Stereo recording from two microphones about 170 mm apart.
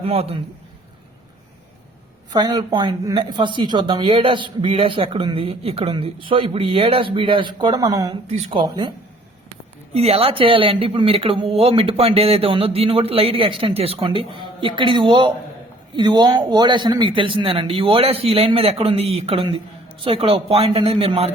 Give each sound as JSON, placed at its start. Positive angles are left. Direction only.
{"t": 0.0, "sound": "speech", "side_deg": -35}
{"t": 2.3, "sound": "a woman's voice", "side_deg": -25}
{"t": 8.3, "sound": "speech", "side_deg": -35}
{"t": 9.9, "sound": "a woman's voice", "side_deg": -35}